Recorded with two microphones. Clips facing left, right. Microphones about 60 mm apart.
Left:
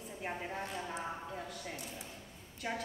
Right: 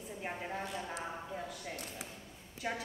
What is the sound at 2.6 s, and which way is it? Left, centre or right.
Speech, centre.